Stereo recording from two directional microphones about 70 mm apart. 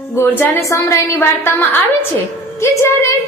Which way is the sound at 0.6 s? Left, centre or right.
Left.